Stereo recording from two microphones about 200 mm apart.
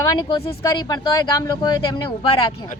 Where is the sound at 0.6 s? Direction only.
20° left (ahead or behind).